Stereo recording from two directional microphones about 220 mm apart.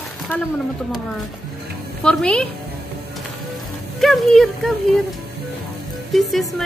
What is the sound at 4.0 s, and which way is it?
Speech, centre (ahead or behind).